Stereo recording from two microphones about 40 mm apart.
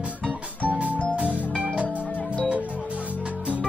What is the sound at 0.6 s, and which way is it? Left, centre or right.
Music, right.